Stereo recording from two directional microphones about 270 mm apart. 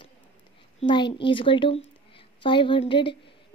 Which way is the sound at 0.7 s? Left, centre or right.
Centre.